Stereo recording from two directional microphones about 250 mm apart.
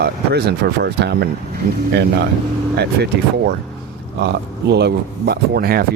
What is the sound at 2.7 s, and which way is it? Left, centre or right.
Speech, right.